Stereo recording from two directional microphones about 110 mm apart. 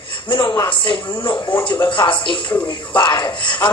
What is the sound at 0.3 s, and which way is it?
Speech, 45° left (ahead or behind).